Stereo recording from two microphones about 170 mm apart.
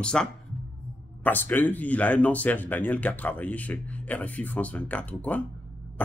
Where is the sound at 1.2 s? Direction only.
10° left (ahead or behind).